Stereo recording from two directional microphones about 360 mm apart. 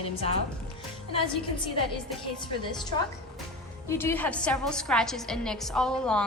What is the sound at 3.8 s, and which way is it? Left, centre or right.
A woman's voice, centre.